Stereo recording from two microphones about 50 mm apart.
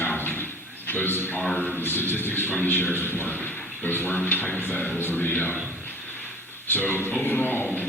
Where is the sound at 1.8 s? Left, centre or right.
Left.